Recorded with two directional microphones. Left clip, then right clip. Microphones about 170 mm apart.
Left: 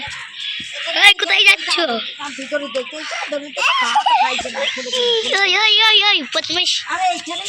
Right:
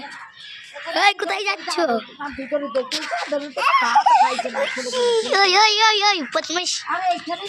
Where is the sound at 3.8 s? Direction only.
15° left (ahead or behind).